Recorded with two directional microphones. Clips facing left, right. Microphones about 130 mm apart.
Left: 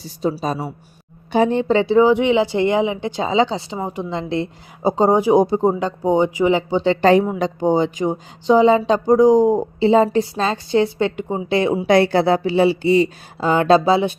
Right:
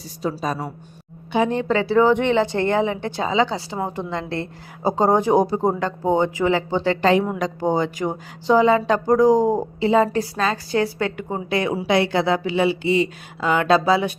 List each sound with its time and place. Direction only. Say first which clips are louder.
0.2 s speech: left 4 dB; 25° left (ahead or behind)
1.3 s speech: left 4 dB; 35° left (ahead or behind)
1.5 s speech: left 4 dB; 25° left (ahead or behind)
2.0 s a woman's voice: left 2 dB; 10° left (ahead or behind)
7.0 s speech: left 4 dB; 40° left (ahead or behind)
7.3 s speech: left 4 dB; 25° left (ahead or behind)
11.9 s speech: left 4 dB; 45° left (ahead or behind); by 14.1 s 25° left (ahead or behind)